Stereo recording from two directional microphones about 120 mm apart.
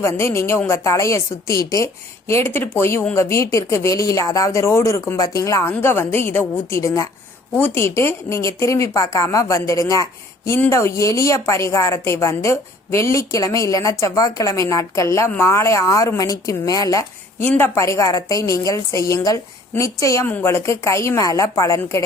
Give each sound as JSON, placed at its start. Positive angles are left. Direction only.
{"t": 0.0, "sound": "speech", "side_deg": 20}
{"t": 17.4, "sound": "speech", "side_deg": 15}